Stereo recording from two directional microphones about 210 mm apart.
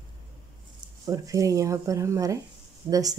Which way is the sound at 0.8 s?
15° right (ahead or behind).